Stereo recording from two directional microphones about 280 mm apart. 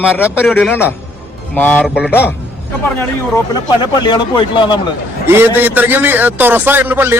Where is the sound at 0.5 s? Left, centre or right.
Centre.